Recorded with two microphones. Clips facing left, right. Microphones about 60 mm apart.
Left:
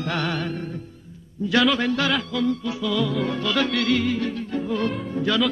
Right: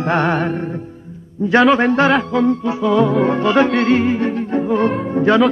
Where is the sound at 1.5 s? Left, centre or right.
Right.